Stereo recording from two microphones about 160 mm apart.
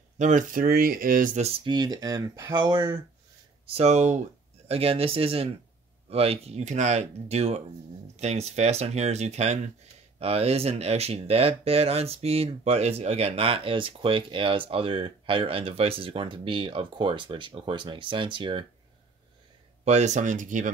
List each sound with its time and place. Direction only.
0.2 s speech: 50° right (ahead or behind)
1.6 s speech: 25° right (ahead or behind)
3.6 s speech: 40° right (ahead or behind)
4.6 s speech: 35° right (ahead or behind)
19.8 s speech: 45° right (ahead or behind)